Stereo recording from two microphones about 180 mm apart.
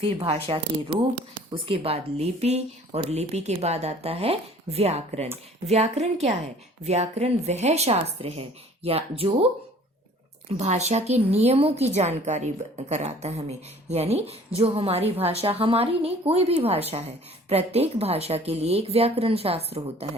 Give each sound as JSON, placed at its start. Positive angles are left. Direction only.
{"t": 0.0, "sound": "a woman's voice", "side_deg": -30}
{"t": 10.6, "sound": "a woman's voice", "side_deg": -40}